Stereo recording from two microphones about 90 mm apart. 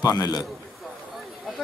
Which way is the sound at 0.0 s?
45° left (ahead or behind).